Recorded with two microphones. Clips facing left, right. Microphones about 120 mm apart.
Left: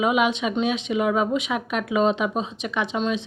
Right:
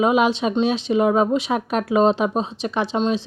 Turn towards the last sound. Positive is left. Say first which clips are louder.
# right 4 dB
turn(degrees=-30)  # may be behind; listen again after turning